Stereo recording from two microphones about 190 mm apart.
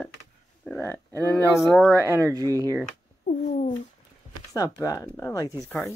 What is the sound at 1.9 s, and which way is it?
Speech, 15° right (ahead or behind).